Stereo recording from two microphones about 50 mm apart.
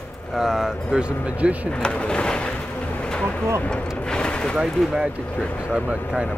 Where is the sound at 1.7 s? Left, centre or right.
Centre.